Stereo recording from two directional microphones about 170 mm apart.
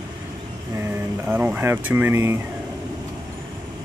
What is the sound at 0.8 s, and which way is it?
Speech, 10° right (ahead or behind).